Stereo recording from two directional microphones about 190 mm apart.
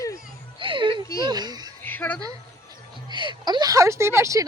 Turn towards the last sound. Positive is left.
turn(degrees=-15)  # may be behind; listen again after turning